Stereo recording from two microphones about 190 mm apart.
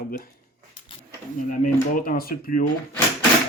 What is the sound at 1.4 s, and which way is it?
Speech, 45° left (ahead or behind).